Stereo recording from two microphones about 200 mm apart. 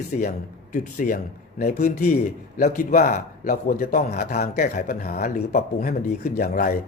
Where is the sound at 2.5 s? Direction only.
45° left (ahead or behind).